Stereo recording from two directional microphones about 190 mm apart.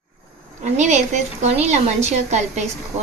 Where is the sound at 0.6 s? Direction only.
40° right (ahead or behind).